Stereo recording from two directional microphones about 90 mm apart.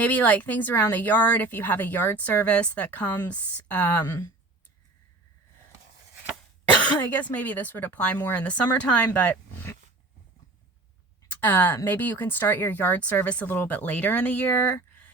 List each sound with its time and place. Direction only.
0.0 s speech: 15° left (ahead or behind)
6.8 s a woman's voice: 20° left (ahead or behind)
11.3 s speech: 20° left (ahead or behind)